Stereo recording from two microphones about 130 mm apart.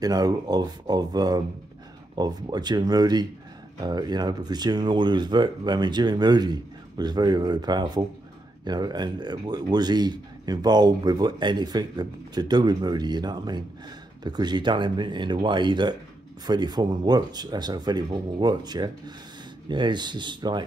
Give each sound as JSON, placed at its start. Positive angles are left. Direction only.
{"t": 0.0, "sound": "speech", "side_deg": -30}